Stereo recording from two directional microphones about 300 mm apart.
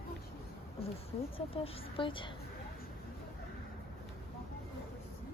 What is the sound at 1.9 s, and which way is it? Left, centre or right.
Speech, centre.